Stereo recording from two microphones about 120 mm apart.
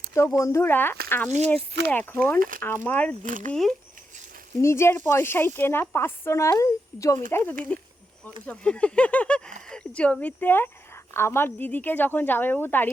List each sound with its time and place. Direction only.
0.1 s a woman's voice: 25° left (ahead or behind)
3.2 s speech: 90° right
3.5 s speech: 5° left (ahead or behind)
4.6 s a woman's voice: 20° left (ahead or behind)